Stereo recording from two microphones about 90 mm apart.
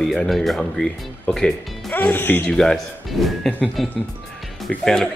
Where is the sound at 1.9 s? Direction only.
20° left (ahead or behind).